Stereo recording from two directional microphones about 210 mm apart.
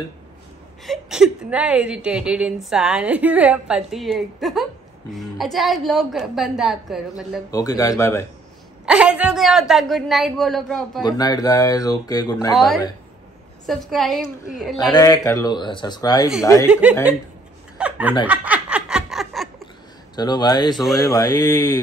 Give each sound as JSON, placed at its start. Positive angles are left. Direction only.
{"t": 0.8, "sound": "a woman's voice", "side_deg": 0}
{"t": 7.5, "sound": "speech", "side_deg": 15}
{"t": 8.8, "sound": "a woman's voice", "side_deg": -5}
{"t": 11.0, "sound": "speech", "side_deg": 20}
{"t": 12.5, "sound": "a woman's voice", "side_deg": 0}
{"t": 14.8, "sound": "speech", "side_deg": 20}
{"t": 17.7, "sound": "chuckle", "side_deg": -5}
{"t": 18.2, "sound": "a sound", "side_deg": -5}
{"t": 20.2, "sound": "speech", "side_deg": 20}
{"t": 20.7, "sound": "a woman's voice", "side_deg": 0}
{"t": 21.0, "sound": "speech", "side_deg": 15}